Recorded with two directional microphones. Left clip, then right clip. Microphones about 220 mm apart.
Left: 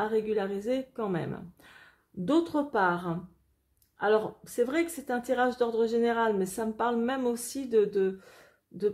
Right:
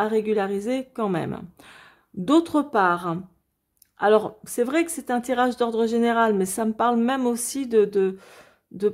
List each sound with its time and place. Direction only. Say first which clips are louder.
0.0 s speech: right 6 dB; 35° right (ahead or behind)